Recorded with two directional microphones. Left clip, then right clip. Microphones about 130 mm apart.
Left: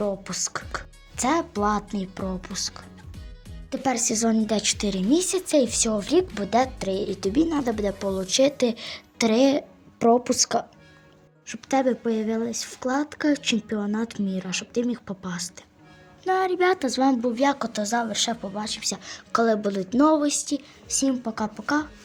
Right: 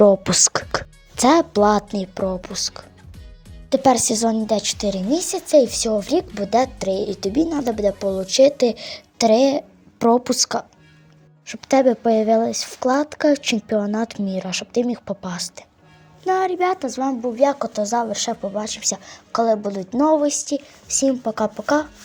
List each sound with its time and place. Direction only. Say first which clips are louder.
0.0 s speech: right 14 dB; 55° right (ahead or behind); by 4.2 s 35° right (ahead or behind)
4.4 s a woman's voice: right 4 dB; 10° right (ahead or behind)
10.0 s speech: right 3 dB; 25° right (ahead or behind)
11.4 s speech: right 7 dB; 40° right (ahead or behind)
16.2 s a sound: right 4 dB; 25° right (ahead or behind)
16.6 s speech: right 1 dB; 5° right (ahead or behind)
18.6 s speech: right 4 dB; 25° right (ahead or behind)
19.0 s speech: right 3 dB; centre (ahead or behind)
20.2 s a woman's voice: right 5 dB; 15° right (ahead or behind)
20.9 s speech: right 6 dB; 30° right (ahead or behind)